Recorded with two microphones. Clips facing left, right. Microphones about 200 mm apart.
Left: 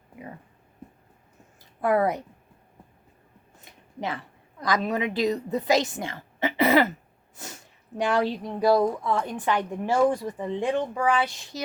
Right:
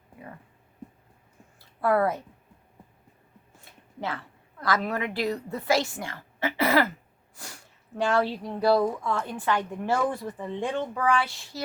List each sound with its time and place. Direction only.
1.8 s speech: 20° left (ahead or behind)
3.6 s a woman's voice: 15° left (ahead or behind)